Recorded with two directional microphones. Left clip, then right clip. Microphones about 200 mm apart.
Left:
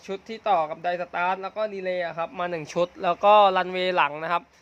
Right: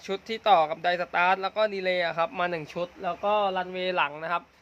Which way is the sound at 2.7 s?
35° left (ahead or behind).